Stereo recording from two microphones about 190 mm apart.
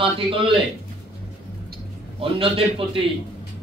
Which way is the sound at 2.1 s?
30° right (ahead or behind).